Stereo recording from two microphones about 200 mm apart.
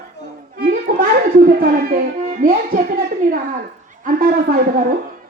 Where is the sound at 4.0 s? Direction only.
45° right (ahead or behind).